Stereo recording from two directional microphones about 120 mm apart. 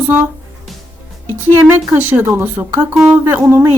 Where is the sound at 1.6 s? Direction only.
15° right (ahead or behind).